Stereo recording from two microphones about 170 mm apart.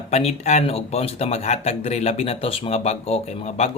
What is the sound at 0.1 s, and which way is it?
Speech, 40° left (ahead or behind).